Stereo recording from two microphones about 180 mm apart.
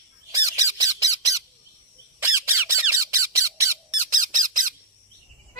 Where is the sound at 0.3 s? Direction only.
20° right (ahead or behind).